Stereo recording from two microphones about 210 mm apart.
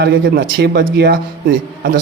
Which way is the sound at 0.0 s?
50° right (ahead or behind).